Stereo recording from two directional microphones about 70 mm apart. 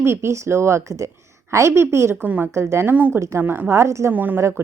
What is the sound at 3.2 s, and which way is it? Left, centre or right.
Speech, right.